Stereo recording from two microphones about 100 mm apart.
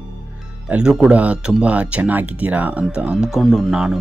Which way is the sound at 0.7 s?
10° right (ahead or behind).